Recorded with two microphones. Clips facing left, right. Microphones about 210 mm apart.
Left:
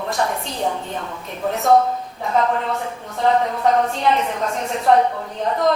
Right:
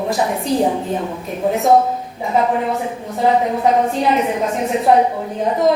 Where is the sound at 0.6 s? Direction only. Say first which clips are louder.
Right 6 dB; 20° right (ahead or behind).